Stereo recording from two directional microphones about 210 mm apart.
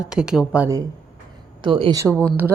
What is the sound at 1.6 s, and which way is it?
Speech, 25° right (ahead or behind).